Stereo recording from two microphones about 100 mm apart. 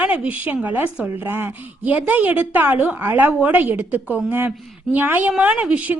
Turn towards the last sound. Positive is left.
turn(degrees=-15)  # may be behind; listen again after turning